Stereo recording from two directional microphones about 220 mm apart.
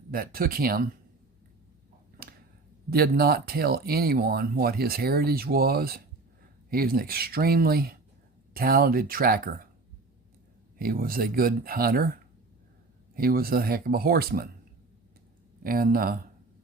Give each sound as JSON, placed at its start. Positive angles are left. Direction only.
{"t": 0.1, "sound": "speech", "side_deg": -40}
{"t": 2.2, "sound": "a sound", "side_deg": -45}
{"t": 2.9, "sound": "speech", "side_deg": -45}
{"t": 10.8, "sound": "speech", "side_deg": -40}
{"t": 15.6, "sound": "speech", "side_deg": -40}